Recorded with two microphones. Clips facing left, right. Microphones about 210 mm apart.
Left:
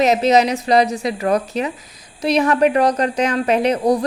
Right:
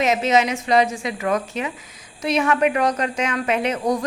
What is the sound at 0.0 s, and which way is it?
Speech, 35° left (ahead or behind).